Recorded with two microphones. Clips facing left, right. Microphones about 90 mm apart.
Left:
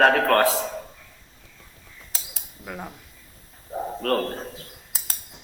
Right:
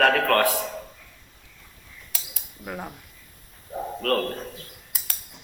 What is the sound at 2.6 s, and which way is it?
Speech, 10° right (ahead or behind).